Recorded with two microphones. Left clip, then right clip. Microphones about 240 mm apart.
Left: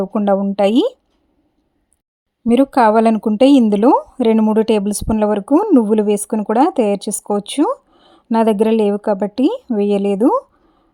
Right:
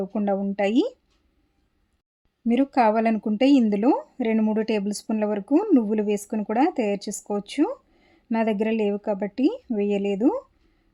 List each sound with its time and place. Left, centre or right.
0.0 s speech: left
2.4 s speech: left